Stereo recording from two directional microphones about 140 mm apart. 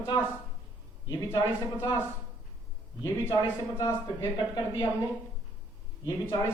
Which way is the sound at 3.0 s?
20° left (ahead or behind).